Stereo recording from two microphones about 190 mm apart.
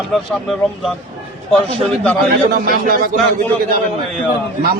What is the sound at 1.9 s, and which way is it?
Speech, centre (ahead or behind).